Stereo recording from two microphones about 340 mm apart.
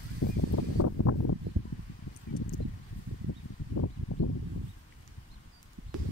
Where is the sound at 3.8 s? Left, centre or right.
Left.